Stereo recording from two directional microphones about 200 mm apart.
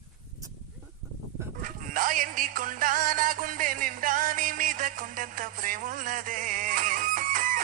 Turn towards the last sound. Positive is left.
turn(degrees=-45)  # may be behind; listen again after turning